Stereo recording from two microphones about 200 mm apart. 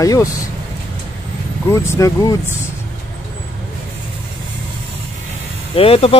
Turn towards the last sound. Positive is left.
turn(degrees=30)  # may be behind; listen again after turning